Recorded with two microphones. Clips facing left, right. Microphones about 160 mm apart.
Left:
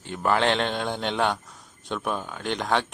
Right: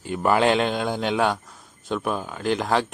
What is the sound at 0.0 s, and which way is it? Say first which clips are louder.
Speech: right 3 dB; 5° right (ahead or behind).